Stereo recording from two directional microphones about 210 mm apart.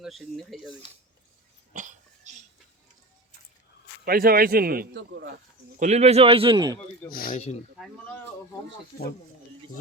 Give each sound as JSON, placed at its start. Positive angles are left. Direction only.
{"t": 0.0, "sound": "speech", "side_deg": 0}
{"t": 1.7, "sound": "cough", "side_deg": -35}
{"t": 4.0, "sound": "a man's voice", "side_deg": -45}
{"t": 5.8, "sound": "a man's voice", "side_deg": -30}
{"t": 7.1, "sound": "speech", "side_deg": 45}
{"t": 7.8, "sound": "speech", "side_deg": 5}